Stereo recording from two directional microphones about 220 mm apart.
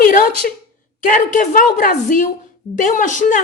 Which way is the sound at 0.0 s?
40° left (ahead or behind).